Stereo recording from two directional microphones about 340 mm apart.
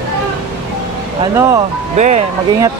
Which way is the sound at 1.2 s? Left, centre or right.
Centre.